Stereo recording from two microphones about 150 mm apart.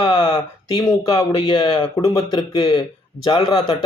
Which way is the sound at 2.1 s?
35° left (ahead or behind).